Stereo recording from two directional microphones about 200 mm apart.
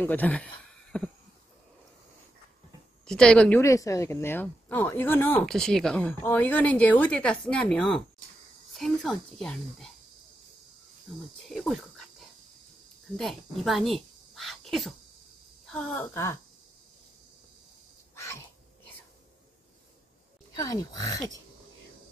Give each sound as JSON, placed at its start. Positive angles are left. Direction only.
{"t": 0.0, "sound": "a woman's voice", "side_deg": 10}
{"t": 3.1, "sound": "a woman's voice", "side_deg": 5}
{"t": 11.5, "sound": "speech", "side_deg": 0}
{"t": 13.1, "sound": "speech", "side_deg": 0}
{"t": 16.0, "sound": "a woman's voice", "side_deg": 15}
{"t": 18.1, "sound": "a sound", "side_deg": 15}
{"t": 20.5, "sound": "a woman's voice", "side_deg": 20}